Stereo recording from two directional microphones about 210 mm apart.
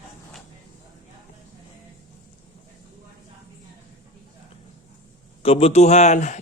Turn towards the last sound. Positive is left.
turn(degrees=35)  # may be behind; listen again after turning